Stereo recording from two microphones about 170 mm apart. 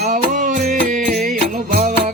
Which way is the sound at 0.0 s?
50° right (ahead or behind).